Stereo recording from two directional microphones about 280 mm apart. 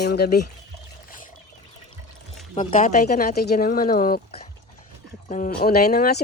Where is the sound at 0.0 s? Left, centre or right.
Left.